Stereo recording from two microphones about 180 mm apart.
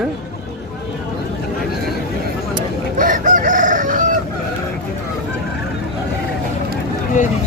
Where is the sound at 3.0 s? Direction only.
45° right (ahead or behind).